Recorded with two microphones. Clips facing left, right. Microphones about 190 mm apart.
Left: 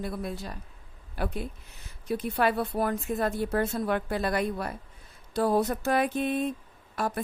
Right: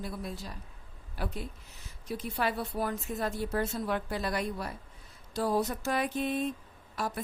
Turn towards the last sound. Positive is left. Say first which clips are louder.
# left 4 dB
turn(degrees=55)  # may be behind; listen again after turning